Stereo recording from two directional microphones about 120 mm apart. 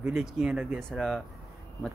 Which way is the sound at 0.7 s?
Centre (ahead or behind).